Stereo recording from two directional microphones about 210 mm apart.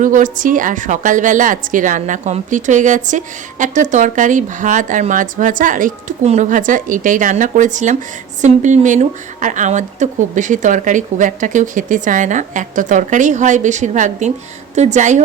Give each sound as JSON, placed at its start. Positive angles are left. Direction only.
{"t": 0.0, "sound": "a woman's voice", "side_deg": -40}